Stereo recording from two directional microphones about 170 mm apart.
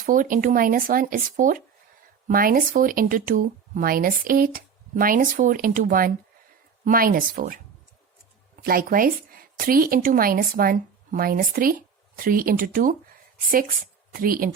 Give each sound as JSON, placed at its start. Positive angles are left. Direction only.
{"t": 0.0, "sound": "speech", "side_deg": -55}
{"t": 8.6, "sound": "speech", "side_deg": -60}
{"t": 14.1, "sound": "speech", "side_deg": -55}